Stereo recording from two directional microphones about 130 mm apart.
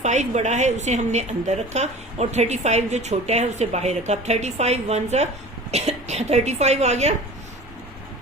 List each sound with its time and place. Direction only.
0.0 s a woman's voice: 65° right (ahead or behind)